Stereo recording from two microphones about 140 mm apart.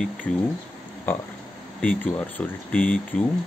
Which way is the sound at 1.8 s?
10° left (ahead or behind).